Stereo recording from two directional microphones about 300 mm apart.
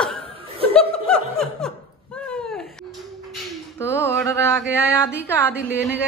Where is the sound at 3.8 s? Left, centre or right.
Centre.